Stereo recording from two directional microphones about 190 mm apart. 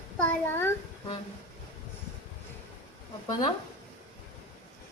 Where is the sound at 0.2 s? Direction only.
10° left (ahead or behind).